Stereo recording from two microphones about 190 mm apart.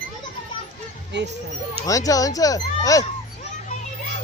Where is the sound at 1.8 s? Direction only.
20° left (ahead or behind).